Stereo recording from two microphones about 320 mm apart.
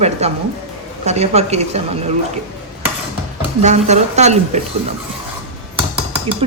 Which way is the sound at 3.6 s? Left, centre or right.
Right.